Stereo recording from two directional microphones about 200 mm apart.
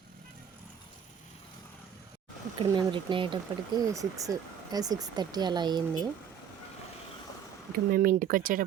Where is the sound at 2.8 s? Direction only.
25° right (ahead or behind).